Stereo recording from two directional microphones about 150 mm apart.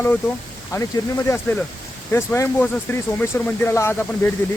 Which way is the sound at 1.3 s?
15° left (ahead or behind).